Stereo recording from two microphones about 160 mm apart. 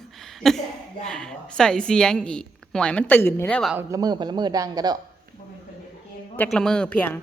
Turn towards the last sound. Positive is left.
turn(degrees=10)  # may be behind; listen again after turning